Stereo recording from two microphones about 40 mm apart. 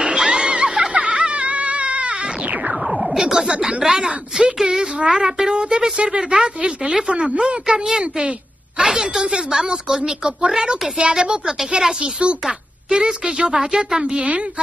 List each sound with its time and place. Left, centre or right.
0.0 s music: right
2.7 s a sound: centre
4.6 s speech: right
7.6 s speech: centre
8.0 s a sound: right
8.8 s speech: centre
12.0 s speech: right